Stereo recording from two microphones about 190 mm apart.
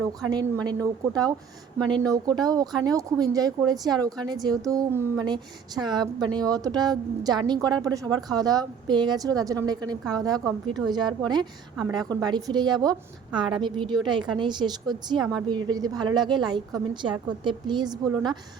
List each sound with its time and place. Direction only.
0.0 s a woman's voice: 20° right (ahead or behind)